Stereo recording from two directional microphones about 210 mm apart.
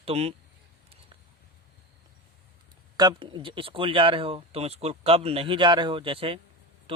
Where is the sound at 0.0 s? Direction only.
30° right (ahead or behind).